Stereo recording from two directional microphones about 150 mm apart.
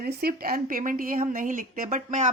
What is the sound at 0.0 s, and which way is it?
A woman's voice, 90° right.